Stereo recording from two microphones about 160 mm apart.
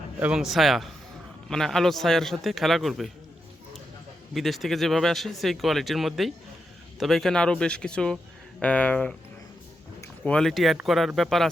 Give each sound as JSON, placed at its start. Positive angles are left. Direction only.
{"t": 0.2, "sound": "speech", "side_deg": -5}
{"t": 4.4, "sound": "speech", "side_deg": 0}
{"t": 10.2, "sound": "speech", "side_deg": 5}